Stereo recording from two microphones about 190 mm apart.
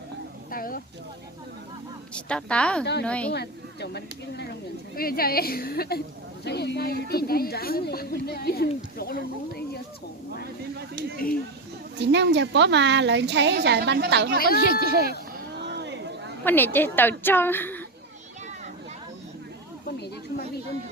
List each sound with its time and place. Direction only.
0.5 s speech: 50° left (ahead or behind)
2.1 s a woman's voice: 5° left (ahead or behind)
3.3 s speech: 60° left (ahead or behind)
10.4 s a sound: 55° right (ahead or behind)
11.9 s a woman's voice: 65° right (ahead or behind)
15.6 s a sound: 65° right (ahead or behind)
16.4 s a woman's voice: 10° left (ahead or behind)